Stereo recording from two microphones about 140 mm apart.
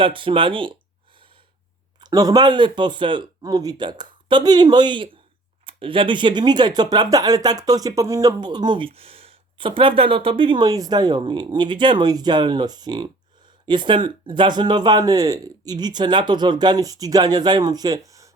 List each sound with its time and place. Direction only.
0.0 s speech: 40° right (ahead or behind)
1.1 s gasp: 35° right (ahead or behind)
2.0 s speech: 30° right (ahead or behind)